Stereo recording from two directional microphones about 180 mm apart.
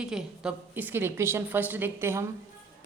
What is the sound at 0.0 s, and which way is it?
A woman's voice, 5° right (ahead or behind).